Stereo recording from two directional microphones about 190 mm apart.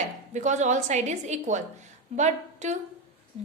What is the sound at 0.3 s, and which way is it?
A woman's voice, 40° right (ahead or behind).